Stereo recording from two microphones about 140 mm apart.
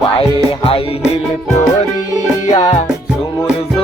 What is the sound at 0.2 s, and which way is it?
Music, 40° left (ahead or behind).